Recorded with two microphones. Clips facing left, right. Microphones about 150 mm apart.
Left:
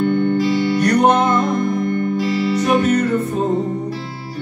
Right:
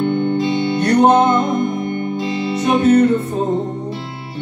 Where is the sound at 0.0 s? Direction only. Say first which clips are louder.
Left 1 dB; 25° right (ahead or behind).